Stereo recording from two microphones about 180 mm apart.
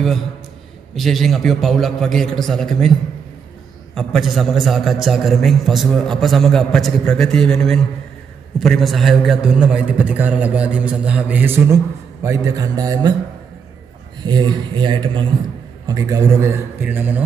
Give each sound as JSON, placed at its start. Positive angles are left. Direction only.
{"t": 0.9, "sound": "a man's voice", "side_deg": 0}
{"t": 3.9, "sound": "a man's voice", "side_deg": 0}
{"t": 14.2, "sound": "a man's voice", "side_deg": -25}